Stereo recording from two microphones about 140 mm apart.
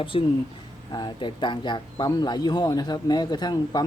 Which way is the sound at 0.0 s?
40° left (ahead or behind).